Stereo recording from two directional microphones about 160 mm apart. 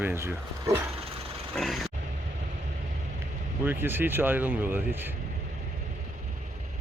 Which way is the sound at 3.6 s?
15° right (ahead or behind).